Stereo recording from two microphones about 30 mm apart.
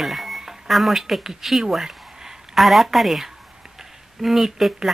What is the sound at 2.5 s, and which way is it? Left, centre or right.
Speech, centre.